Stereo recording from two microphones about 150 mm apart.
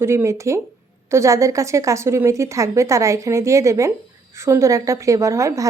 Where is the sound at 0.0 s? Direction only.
15° right (ahead or behind).